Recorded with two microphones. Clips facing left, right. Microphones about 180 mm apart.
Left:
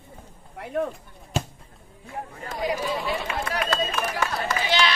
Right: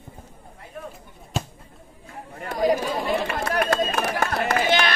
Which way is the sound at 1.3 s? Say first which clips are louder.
Left 1 dB; centre (ahead or behind).